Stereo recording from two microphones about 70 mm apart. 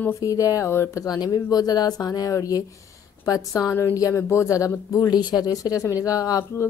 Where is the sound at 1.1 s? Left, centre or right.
Left.